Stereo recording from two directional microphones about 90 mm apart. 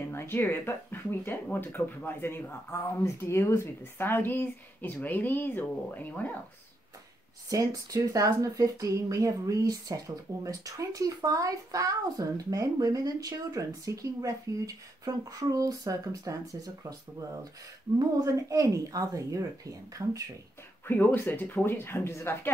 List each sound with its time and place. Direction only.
0.1 s speech: 25° left (ahead or behind)
7.4 s a woman's voice: 40° right (ahead or behind)
17.9 s a woman's voice: 40° right (ahead or behind)
20.8 s speech: 20° left (ahead or behind)